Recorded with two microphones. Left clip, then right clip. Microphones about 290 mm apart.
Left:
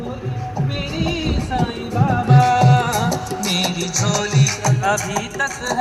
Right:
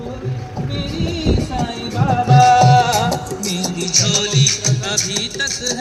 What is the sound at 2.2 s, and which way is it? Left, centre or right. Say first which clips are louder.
Music: right 6 dB; right.